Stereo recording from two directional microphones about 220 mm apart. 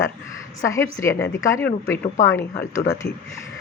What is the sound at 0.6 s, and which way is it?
Speech, 15° left (ahead or behind).